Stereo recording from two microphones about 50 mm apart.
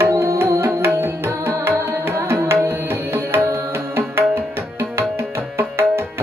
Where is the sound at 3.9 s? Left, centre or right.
Right.